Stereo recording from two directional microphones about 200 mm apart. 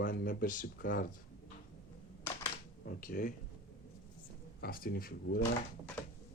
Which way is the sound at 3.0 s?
45° left (ahead or behind).